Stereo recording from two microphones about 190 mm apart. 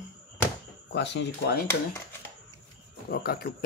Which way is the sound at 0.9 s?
65° left (ahead or behind).